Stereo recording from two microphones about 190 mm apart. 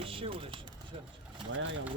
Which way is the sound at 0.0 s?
30° right (ahead or behind).